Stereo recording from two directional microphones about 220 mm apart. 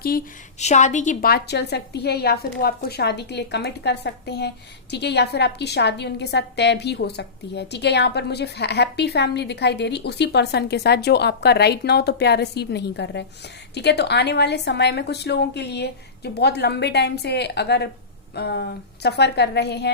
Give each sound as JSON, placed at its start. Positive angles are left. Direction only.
{"t": 0.6, "sound": "a woman's voice", "side_deg": 30}